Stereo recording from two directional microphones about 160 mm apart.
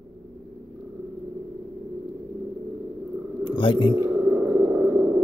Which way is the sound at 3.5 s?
30° left (ahead or behind).